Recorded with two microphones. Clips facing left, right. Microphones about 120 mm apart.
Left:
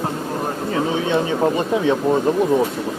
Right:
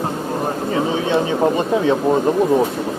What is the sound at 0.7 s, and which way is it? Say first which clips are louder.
Speech: right 1 dB; 10° right (ahead or behind).